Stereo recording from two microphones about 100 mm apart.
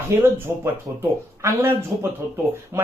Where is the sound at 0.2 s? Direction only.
25° right (ahead or behind).